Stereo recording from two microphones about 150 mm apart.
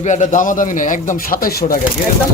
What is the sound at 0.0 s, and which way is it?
A man's voice, 55° left (ahead or behind).